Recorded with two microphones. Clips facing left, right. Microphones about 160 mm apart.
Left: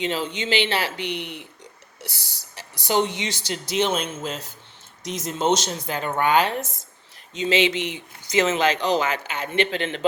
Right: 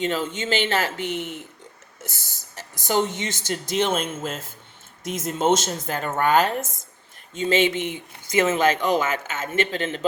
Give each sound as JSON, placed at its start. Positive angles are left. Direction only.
{"t": 0.0, "sound": "a man's voice", "side_deg": -45}